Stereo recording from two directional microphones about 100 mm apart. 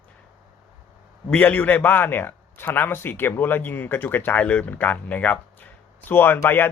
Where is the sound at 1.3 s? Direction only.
15° left (ahead or behind).